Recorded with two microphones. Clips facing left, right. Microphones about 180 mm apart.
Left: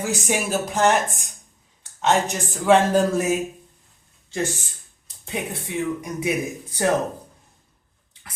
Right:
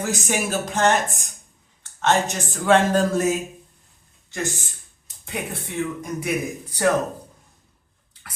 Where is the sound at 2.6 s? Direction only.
5° left (ahead or behind).